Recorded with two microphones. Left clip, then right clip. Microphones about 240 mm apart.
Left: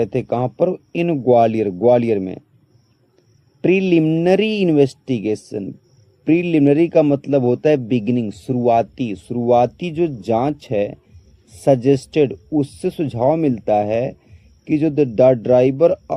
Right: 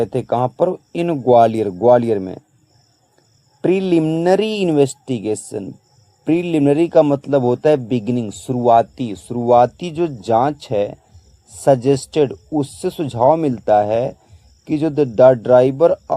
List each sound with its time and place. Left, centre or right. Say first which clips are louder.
0.0 s a man's voice: right 2 dB; centre
3.8 s a man's voice: left 1 dB; centre